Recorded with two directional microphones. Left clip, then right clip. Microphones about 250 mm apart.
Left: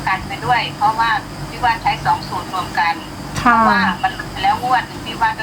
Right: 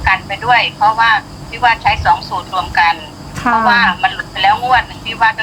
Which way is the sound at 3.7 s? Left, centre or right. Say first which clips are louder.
Right 5 dB; right.